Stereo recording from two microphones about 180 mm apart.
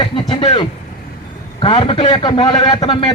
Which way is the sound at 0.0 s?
25° left (ahead or behind).